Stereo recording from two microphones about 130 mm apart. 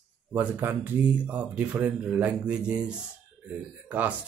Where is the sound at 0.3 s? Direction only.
15° right (ahead or behind).